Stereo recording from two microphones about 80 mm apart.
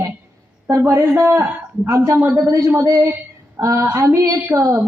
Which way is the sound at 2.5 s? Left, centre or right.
Right.